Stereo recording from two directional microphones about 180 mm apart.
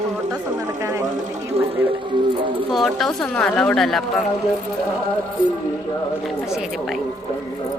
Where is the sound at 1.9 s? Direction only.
25° right (ahead or behind).